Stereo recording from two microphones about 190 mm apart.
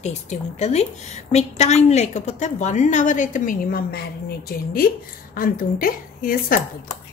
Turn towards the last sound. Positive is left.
turn(degrees=50)  # may be behind; listen again after turning